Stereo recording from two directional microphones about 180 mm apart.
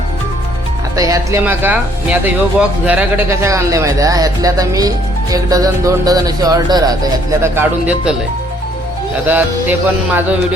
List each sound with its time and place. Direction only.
0.9 s speech: 20° right (ahead or behind)
9.2 s music: 10° right (ahead or behind)